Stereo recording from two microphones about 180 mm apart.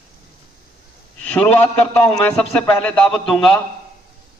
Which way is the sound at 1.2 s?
5° left (ahead or behind).